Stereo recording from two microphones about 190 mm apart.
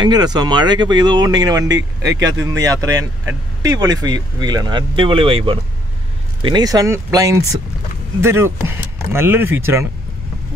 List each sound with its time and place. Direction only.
0.0 s speech: 20° right (ahead or behind)